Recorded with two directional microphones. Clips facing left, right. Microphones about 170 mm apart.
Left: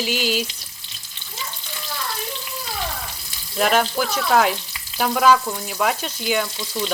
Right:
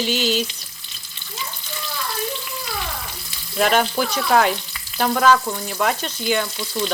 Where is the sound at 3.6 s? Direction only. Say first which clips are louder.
Right 1 dB; centre (ahead or behind).